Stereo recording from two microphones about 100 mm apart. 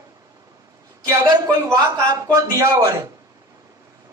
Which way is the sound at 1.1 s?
30° right (ahead or behind).